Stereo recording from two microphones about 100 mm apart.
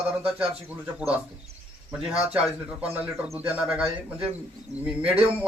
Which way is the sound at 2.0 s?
5° right (ahead or behind).